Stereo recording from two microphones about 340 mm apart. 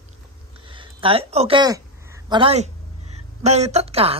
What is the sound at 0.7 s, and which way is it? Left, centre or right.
A woman's voice, centre.